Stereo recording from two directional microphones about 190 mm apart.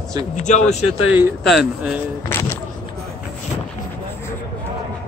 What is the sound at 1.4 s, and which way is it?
Speech, 5° right (ahead or behind).